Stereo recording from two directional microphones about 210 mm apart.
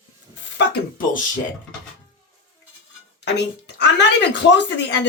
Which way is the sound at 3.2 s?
55° left (ahead or behind).